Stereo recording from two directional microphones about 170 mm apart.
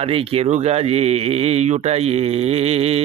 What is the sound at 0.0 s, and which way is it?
A man's voice, 35° right (ahead or behind).